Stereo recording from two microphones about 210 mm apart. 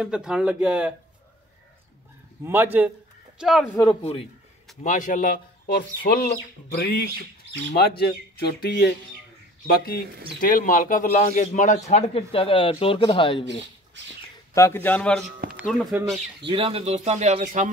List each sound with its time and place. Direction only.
0.0 s speech: 5° right (ahead or behind)
2.4 s a man's voice: 10° right (ahead or behind)
4.0 s a man's voice: 30° left (ahead or behind); by 8.9 s 50° left (ahead or behind)
10.4 s a man's voice: 40° left (ahead or behind)
14.5 s a man's voice: 10° left (ahead or behind); by 16.0 s 5° right (ahead or behind)
16.4 s speech: 25° right (ahead or behind)